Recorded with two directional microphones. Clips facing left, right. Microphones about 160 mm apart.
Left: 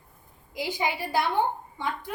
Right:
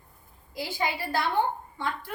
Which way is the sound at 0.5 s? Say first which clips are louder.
Left 1 dB; 15° left (ahead or behind).